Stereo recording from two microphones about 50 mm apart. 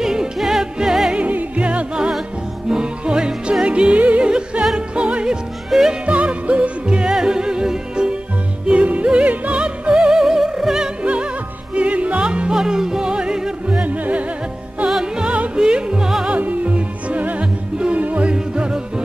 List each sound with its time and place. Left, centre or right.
0.0 s music: centre
1.2 s music: right
4.7 s opera: right
5.7 s music: centre
6.0 s music: right
11.7 s music: right
13.8 s music: right
16.3 s music: right
18.3 s music: centre